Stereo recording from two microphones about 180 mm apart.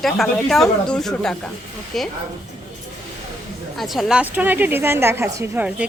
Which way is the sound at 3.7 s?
Centre (ahead or behind).